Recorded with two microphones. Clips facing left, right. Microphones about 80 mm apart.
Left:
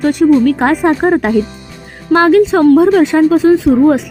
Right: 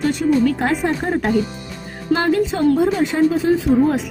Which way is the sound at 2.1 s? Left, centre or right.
Left.